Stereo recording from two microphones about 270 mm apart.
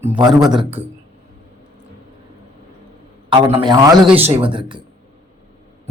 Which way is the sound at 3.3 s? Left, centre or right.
Centre.